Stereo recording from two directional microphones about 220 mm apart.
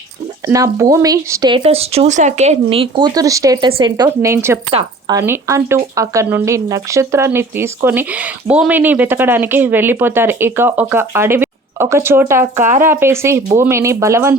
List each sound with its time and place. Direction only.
0.4 s speech: 15° right (ahead or behind)
12.5 s speech: 35° right (ahead or behind)
12.8 s speech: 10° right (ahead or behind)